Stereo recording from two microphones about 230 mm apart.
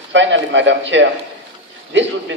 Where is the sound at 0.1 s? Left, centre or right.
Right.